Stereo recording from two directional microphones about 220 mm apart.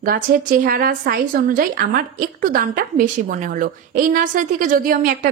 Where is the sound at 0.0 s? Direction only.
40° right (ahead or behind).